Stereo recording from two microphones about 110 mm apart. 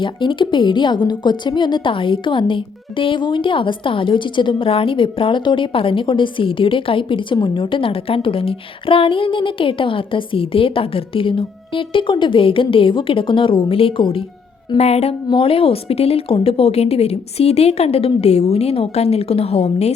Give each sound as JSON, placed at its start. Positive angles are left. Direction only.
{"t": 0.0, "sound": "a woman's voice", "side_deg": 50}
{"t": 14.8, "sound": "music", "side_deg": 75}
{"t": 15.3, "sound": "a woman's voice", "side_deg": 55}